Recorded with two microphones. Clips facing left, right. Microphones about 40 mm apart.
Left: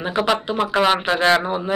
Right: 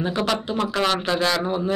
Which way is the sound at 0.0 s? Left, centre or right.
Left.